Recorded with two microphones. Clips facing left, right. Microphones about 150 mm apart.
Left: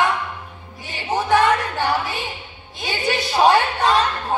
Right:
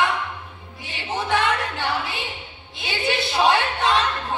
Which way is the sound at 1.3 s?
40° left (ahead or behind).